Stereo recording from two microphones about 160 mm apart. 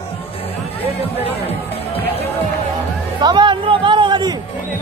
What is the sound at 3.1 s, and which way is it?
Music, 30° right (ahead or behind).